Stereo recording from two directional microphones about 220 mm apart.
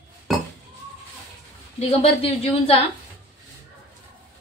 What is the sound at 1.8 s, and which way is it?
A woman's voice, 25° left (ahead or behind).